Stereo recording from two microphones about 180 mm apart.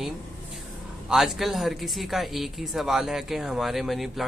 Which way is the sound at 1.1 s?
Centre (ahead or behind).